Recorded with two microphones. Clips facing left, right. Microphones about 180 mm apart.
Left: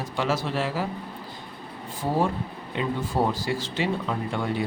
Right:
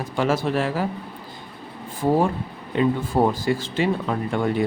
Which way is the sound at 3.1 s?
50° right (ahead or behind).